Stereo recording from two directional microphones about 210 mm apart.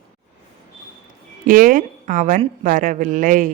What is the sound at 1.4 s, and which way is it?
A woman's voice, 40° right (ahead or behind).